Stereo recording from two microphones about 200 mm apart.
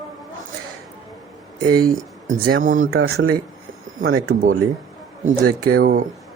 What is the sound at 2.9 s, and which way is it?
Speech, 90° right.